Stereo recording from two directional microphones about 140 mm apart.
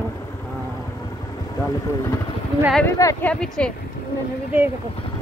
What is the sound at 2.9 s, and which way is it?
Speech, 25° left (ahead or behind).